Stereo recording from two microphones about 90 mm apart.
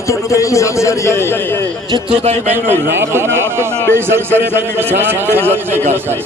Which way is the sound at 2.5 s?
25° right (ahead or behind).